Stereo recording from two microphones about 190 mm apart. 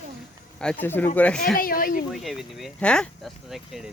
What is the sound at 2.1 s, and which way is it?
Speech, centre (ahead or behind).